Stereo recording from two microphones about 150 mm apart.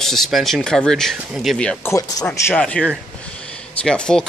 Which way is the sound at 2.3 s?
10° left (ahead or behind).